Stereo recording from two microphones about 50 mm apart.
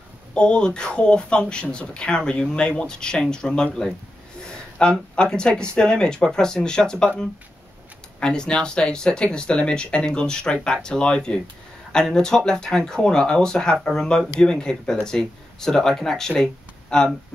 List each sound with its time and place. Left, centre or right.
0.3 s speech: centre
4.4 s a sound: centre
5.1 s speech: centre
8.2 s speech: centre